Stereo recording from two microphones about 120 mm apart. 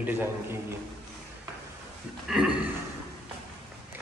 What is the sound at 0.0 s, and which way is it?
Speech, 15° right (ahead or behind).